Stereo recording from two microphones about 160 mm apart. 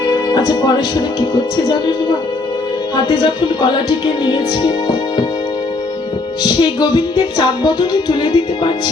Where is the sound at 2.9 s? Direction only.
25° left (ahead or behind).